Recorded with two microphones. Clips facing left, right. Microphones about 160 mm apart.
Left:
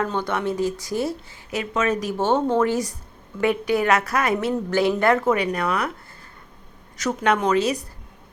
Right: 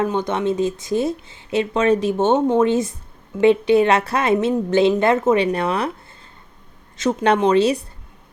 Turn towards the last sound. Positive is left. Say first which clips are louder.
# right 5 dB
turn(degrees=-30)  # may be behind; listen again after turning